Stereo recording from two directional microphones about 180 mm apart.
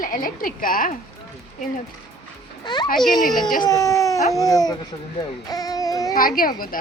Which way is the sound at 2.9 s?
Centre (ahead or behind).